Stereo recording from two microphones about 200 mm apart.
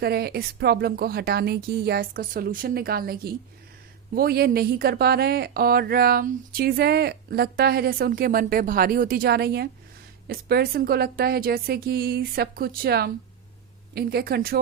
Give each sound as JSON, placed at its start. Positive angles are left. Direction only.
{"t": 0.0, "sound": "a woman's voice", "side_deg": -50}